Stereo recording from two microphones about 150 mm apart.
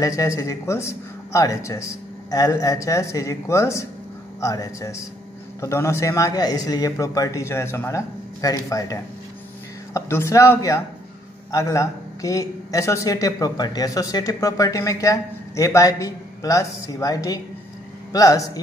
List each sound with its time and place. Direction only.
0.0 s speech: 20° left (ahead or behind)